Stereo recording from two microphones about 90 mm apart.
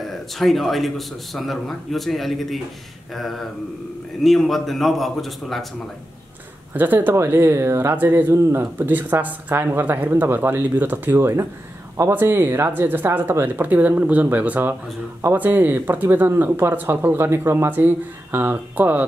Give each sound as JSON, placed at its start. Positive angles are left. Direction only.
{"t": 0.0, "sound": "speech", "side_deg": 0}
{"t": 6.7, "sound": "speech", "side_deg": -20}